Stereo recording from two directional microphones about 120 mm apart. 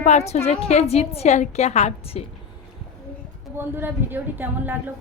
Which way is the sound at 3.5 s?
15° right (ahead or behind).